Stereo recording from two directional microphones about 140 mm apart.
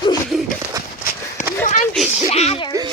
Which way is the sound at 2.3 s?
50° left (ahead or behind).